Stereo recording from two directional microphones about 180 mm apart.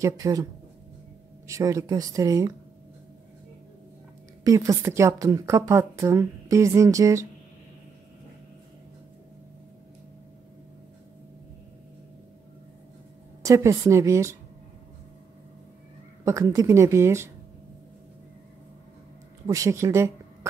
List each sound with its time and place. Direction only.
0.0 s speech: 20° right (ahead or behind)
1.5 s speech: 15° right (ahead or behind)
4.5 s a woman's voice: 15° right (ahead or behind)
13.4 s a woman's voice: 15° right (ahead or behind)
16.3 s a woman's voice: 15° right (ahead or behind)
19.4 s a woman's voice: 15° right (ahead or behind)